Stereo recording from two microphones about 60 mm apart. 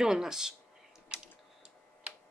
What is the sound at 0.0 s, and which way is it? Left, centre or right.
Speech, centre.